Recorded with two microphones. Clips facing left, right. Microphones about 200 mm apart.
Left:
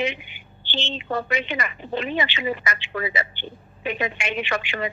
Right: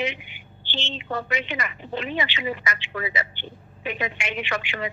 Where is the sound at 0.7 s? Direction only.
30° left (ahead or behind).